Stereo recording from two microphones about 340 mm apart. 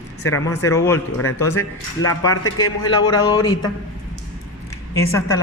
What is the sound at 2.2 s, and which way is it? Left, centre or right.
A woman's voice, centre.